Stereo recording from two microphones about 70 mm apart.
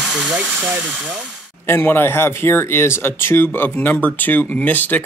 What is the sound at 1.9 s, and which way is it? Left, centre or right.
Speech, left.